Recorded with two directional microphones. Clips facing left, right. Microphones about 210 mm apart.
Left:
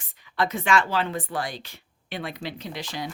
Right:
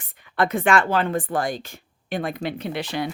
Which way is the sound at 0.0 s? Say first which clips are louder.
Right 4 dB; 55° right (ahead or behind).